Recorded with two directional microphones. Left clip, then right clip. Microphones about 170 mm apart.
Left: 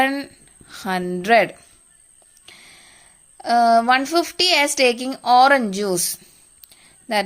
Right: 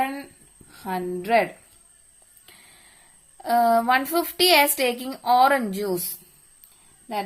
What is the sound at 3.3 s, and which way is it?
A woman's voice, 25° left (ahead or behind).